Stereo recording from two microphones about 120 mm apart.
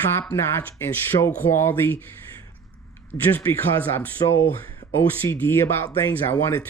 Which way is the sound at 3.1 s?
20° left (ahead or behind).